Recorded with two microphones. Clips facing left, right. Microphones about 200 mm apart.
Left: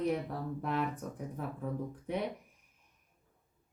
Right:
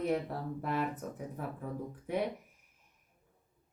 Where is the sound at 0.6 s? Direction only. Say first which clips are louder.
Even; 5° right (ahead or behind).